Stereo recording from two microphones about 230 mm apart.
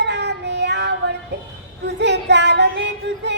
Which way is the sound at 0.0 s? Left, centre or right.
Right.